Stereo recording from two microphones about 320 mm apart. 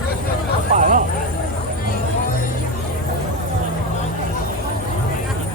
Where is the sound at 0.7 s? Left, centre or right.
Right.